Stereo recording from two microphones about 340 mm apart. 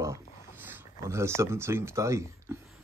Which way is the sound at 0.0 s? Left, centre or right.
Centre.